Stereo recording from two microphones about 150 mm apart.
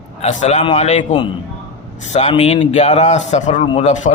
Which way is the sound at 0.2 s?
50° left (ahead or behind).